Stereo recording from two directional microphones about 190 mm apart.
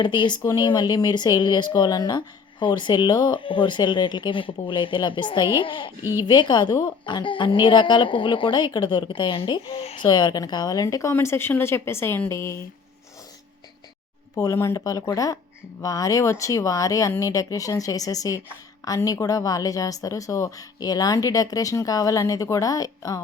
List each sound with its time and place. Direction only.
0.0 s a woman's voice: 25° left (ahead or behind)
6.0 s speech: 15° right (ahead or behind)
6.2 s a woman's voice: 25° left (ahead or behind)
14.3 s a woman's voice: 15° left (ahead or behind)